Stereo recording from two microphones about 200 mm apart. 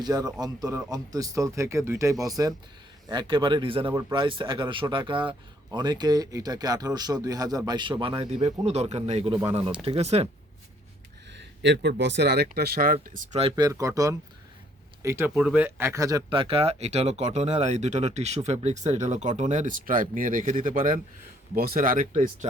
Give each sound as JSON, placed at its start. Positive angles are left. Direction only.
{"t": 0.0, "sound": "speech", "side_deg": -20}
{"t": 11.3, "sound": "speech", "side_deg": -60}
{"t": 13.4, "sound": "speech", "side_deg": -20}